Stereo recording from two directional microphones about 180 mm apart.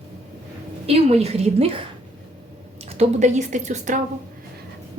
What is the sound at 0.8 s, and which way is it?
Speech, 35° right (ahead or behind).